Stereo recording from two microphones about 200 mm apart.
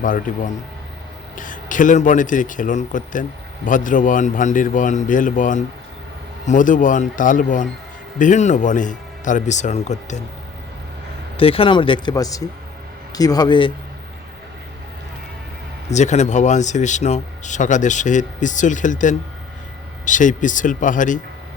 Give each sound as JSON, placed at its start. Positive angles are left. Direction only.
{"t": 0.0, "sound": "speech", "side_deg": 40}
{"t": 11.3, "sound": "speech", "side_deg": 25}
{"t": 15.9, "sound": "speech", "side_deg": 35}